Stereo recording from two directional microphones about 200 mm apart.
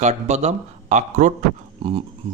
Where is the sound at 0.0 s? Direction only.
35° right (ahead or behind).